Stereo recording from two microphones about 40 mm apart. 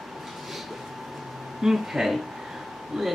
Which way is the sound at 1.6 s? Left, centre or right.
Centre.